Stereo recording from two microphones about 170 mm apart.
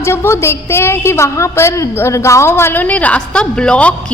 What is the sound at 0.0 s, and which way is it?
A man's voice, 15° left (ahead or behind).